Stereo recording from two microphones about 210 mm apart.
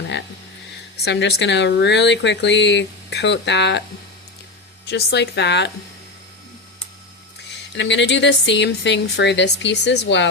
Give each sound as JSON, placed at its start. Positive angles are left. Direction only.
{"t": 1.0, "sound": "speech", "side_deg": 55}
{"t": 4.9, "sound": "speech", "side_deg": 55}
{"t": 7.7, "sound": "speech", "side_deg": 60}